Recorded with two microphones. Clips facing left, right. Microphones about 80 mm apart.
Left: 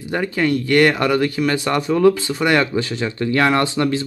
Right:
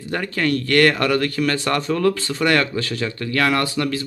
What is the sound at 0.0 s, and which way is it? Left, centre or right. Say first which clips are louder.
Speech: left 3 dB; centre.